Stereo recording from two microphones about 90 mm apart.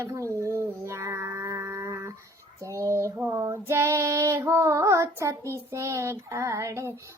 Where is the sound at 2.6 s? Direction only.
35° right (ahead or behind).